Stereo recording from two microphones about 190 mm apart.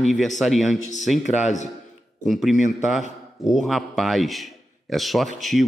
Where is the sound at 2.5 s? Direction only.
40° left (ahead or behind).